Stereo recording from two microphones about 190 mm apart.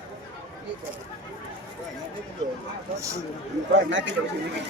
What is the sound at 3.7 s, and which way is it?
Speech, 75° right (ahead or behind).